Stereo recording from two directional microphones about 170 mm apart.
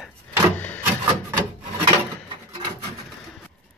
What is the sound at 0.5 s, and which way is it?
Wood, 10° left (ahead or behind).